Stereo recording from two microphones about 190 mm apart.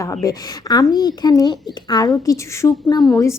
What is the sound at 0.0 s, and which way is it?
A woman's voice, 15° left (ahead or behind).